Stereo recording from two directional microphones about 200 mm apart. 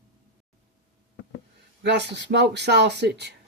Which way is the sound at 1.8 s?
60° right (ahead or behind).